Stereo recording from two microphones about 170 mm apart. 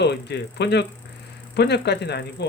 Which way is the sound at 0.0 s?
85° left.